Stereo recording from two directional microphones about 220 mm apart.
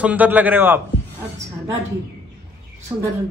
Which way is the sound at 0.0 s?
5° right (ahead or behind).